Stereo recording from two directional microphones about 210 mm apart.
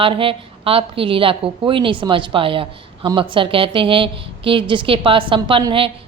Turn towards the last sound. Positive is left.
turn(degrees=-25)  # may be behind; listen again after turning